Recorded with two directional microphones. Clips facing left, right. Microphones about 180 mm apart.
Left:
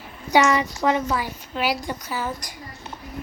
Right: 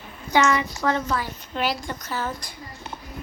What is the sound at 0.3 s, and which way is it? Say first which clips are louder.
A woman's voice: left 2 dB; 15° left (ahead or behind).